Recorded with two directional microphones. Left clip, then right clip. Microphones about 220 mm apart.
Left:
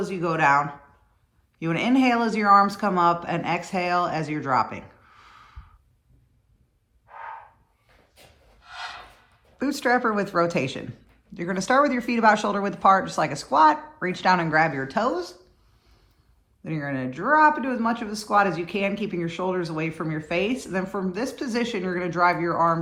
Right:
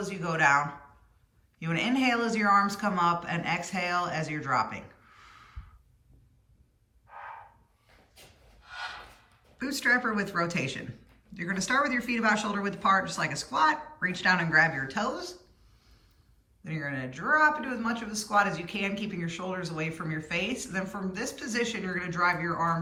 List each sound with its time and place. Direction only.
0.0 s speech: 20° left (ahead or behind)
8.6 s a sound: centre (ahead or behind)
9.6 s speech: 15° left (ahead or behind)
16.6 s speech: 20° left (ahead or behind)